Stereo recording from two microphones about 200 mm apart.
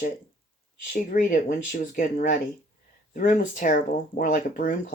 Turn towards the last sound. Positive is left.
turn(degrees=40)  # may be behind; listen again after turning